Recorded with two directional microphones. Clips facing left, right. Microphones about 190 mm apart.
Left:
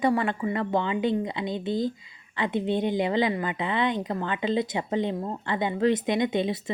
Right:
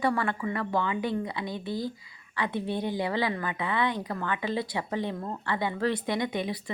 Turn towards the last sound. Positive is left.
turn(degrees=25)  # may be behind; listen again after turning